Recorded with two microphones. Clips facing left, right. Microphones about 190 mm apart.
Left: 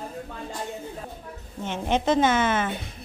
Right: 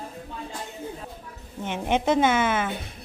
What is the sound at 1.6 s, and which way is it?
A woman's voice, 15° right (ahead or behind).